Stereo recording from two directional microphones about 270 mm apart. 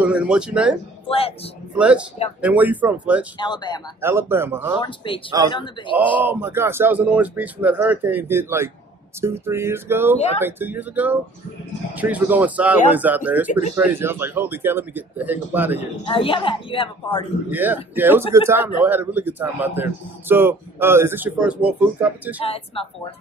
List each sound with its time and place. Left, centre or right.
0.0 s speech: centre
1.0 s speech: left
1.8 s speech: centre
3.3 s speech: centre
4.0 s a man's voice: centre
4.7 s a woman's voice: centre
5.9 s a man's voice: centre
10.1 s a woman's voice: left
10.4 s a man's voice: centre
16.1 s a woman's voice: centre
17.5 s a man's voice: centre
22.4 s a woman's voice: left